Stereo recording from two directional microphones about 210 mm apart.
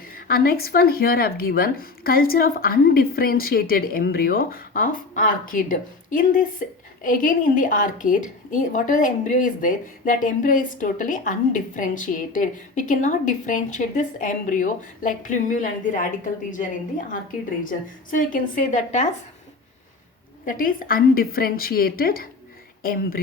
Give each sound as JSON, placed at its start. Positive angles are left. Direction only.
{"t": 0.1, "sound": "a woman's voice", "side_deg": 45}
{"t": 20.4, "sound": "speech", "side_deg": 40}